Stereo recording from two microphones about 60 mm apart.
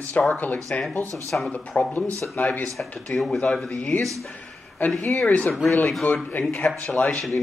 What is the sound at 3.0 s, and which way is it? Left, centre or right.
A man's voice, centre.